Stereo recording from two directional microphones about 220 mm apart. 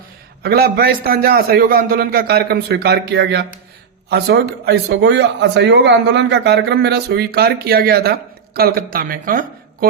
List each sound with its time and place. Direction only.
0.4 s speech: 45° right (ahead or behind)